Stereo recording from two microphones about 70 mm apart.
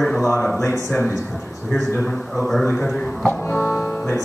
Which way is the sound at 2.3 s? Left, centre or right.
Centre.